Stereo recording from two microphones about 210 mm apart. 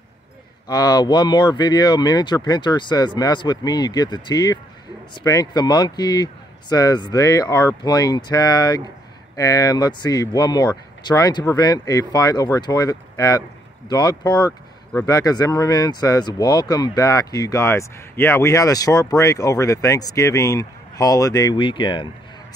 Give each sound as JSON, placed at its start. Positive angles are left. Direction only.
{"t": 0.7, "sound": "speech", "side_deg": 20}